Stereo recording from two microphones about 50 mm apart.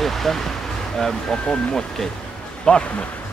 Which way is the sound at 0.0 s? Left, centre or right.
Centre.